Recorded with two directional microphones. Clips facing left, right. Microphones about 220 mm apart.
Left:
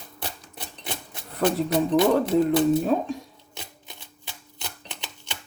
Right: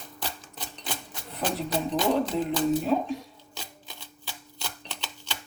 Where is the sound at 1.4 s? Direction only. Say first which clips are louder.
Left 7 dB; 55° left (ahead or behind).